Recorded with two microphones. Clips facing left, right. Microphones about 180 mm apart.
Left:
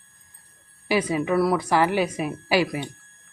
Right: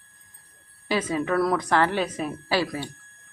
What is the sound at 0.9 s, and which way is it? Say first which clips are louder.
A woman's voice: left 2 dB; 10° left (ahead or behind).